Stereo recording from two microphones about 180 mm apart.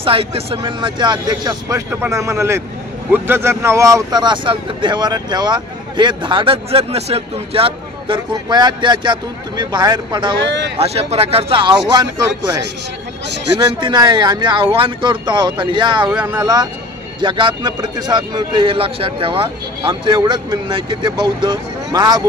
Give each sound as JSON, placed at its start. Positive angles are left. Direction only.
{"t": 0.0, "sound": "speech", "side_deg": -30}
{"t": 16.1, "sound": "speech", "side_deg": -5}
{"t": 16.3, "sound": "speech", "side_deg": -20}